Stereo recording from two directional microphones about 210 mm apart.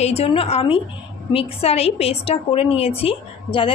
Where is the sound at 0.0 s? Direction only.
30° left (ahead or behind).